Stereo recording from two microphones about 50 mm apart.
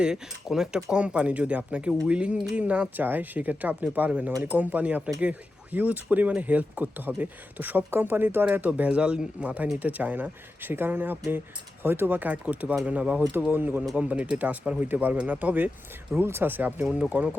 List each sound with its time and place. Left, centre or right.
0.0 s speech: centre
3.0 s speech: right
9.0 s speech: right
10.7 s speech: right
13.9 s speech: right
16.1 s speech: right